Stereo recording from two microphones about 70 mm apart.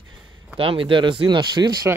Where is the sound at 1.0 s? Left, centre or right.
Right.